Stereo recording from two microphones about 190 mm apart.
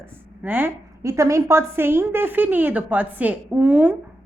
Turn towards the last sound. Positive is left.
turn(degrees=-5)  # may be behind; listen again after turning